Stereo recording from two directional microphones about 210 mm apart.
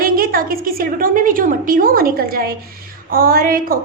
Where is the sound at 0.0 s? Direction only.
45° right (ahead or behind).